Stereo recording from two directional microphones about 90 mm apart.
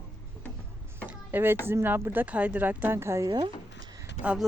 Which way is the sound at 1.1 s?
20° right (ahead or behind).